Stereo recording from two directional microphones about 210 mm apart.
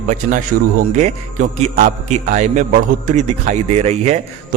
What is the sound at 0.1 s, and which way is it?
A man's voice, 35° right (ahead or behind).